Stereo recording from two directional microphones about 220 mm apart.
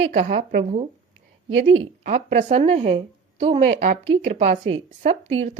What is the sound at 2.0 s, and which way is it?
A woman's voice, 35° right (ahead or behind).